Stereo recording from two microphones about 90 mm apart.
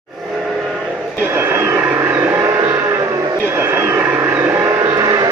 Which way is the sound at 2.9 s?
35° right (ahead or behind).